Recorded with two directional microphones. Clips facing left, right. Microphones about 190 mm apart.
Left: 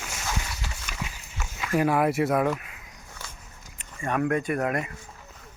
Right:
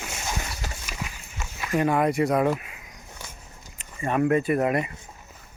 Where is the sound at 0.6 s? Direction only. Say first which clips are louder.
Right 3 dB; 40° right (ahead or behind).